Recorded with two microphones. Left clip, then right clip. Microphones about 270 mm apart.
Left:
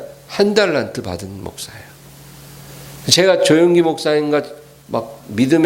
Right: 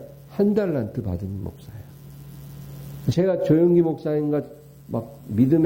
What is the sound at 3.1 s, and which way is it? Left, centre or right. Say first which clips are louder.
Speech: left 9 dB; centre.